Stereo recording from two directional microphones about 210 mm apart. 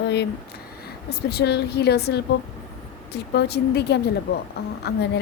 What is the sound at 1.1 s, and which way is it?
A woman's voice, 50° left (ahead or behind).